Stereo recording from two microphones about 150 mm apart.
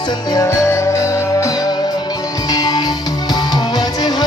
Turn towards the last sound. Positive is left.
turn(degrees=25)  # may be behind; listen again after turning